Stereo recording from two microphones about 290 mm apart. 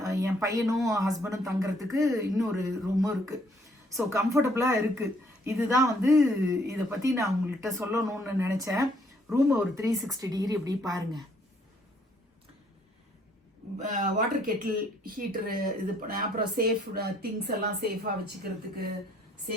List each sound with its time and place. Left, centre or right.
0.0 s a sound: centre
0.9 s speech: centre
13.7 s speech: right